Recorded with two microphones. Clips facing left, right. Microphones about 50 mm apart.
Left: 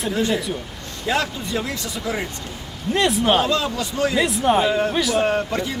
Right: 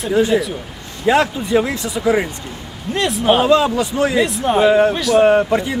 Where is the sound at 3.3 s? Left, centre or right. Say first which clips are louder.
Right 7 dB; centre.